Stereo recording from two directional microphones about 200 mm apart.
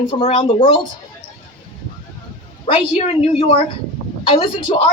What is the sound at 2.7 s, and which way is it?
Speech, 30° left (ahead or behind).